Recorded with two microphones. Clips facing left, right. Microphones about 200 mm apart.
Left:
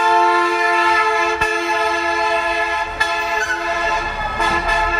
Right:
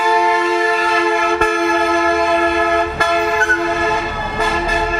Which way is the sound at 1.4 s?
55° right (ahead or behind).